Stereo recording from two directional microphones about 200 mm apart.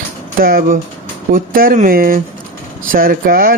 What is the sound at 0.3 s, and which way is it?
Speech, 45° right (ahead or behind).